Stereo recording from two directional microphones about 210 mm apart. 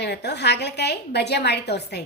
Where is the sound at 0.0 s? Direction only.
50° left (ahead or behind).